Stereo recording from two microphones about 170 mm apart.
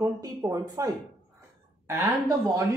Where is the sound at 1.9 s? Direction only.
15° right (ahead or behind).